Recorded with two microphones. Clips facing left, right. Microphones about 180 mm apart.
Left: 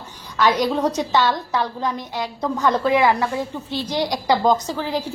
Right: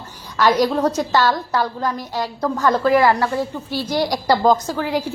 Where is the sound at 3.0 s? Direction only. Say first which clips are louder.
Right 2 dB; 15° left (ahead or behind).